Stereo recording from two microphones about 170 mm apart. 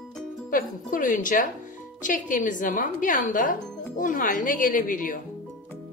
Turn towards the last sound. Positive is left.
turn(degrees=55)  # may be behind; listen again after turning